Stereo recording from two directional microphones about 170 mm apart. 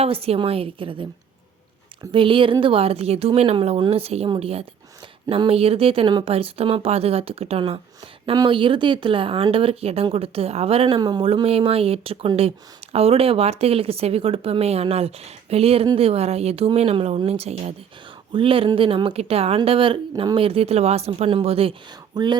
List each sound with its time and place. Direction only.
0.0 s a woman's voice: 35° right (ahead or behind)
2.1 s a woman's voice: 30° right (ahead or behind)